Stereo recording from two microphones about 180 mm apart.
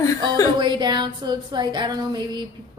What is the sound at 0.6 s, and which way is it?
Speech, 25° right (ahead or behind).